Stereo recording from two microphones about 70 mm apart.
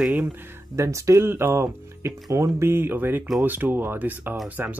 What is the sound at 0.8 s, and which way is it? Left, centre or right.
Speech, right.